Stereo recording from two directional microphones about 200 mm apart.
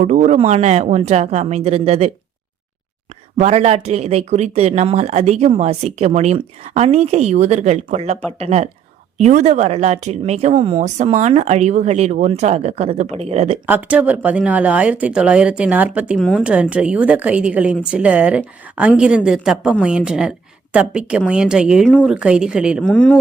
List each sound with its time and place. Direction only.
0.0 s speech: 35° right (ahead or behind)
3.3 s speech: 35° right (ahead or behind)
13.7 s a woman's voice: 10° right (ahead or behind)
22.8 s a woman's voice: 5° left (ahead or behind)